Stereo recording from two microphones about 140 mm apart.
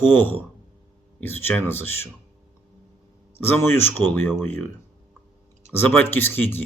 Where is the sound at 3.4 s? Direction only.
15° left (ahead or behind).